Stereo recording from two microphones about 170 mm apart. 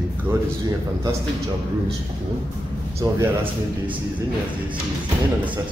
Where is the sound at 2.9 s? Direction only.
15° right (ahead or behind).